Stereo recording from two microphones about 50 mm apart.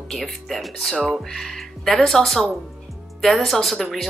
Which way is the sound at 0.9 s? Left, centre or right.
Centre.